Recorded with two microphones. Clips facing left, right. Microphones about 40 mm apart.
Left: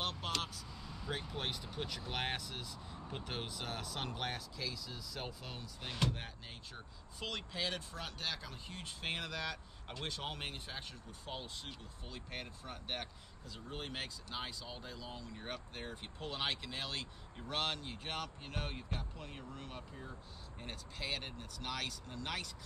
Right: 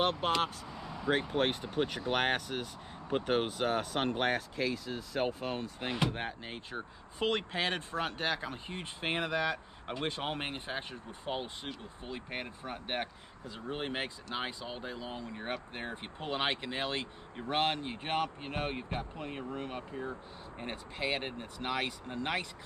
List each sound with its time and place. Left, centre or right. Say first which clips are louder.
0.0 s speech: right 10 dB; right
0.7 s vehicle: right 11 dB; right
1.1 s speech: right 11 dB; right
5.9 s speech: right 5 dB; right
6.1 s speech: right 10 dB; right